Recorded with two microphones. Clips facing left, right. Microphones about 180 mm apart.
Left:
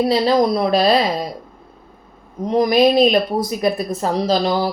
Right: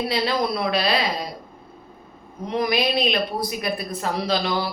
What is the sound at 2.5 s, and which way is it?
Speech, 40° left (ahead or behind).